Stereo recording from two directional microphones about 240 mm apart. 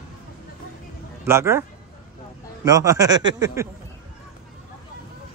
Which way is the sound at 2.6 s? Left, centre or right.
Centre.